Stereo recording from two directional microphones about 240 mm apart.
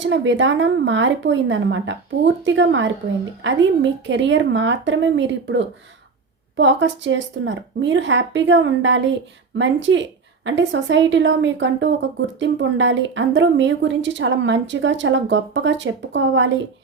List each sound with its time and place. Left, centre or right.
0.0 s a woman's voice: right